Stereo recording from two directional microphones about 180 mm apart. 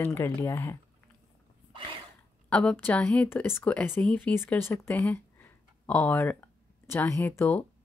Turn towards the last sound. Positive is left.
turn(degrees=10)  # may be behind; listen again after turning